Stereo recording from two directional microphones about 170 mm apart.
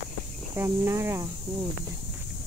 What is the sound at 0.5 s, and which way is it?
Speech, 15° right (ahead or behind).